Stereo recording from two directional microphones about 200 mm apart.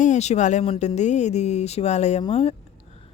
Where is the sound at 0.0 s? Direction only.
35° left (ahead or behind).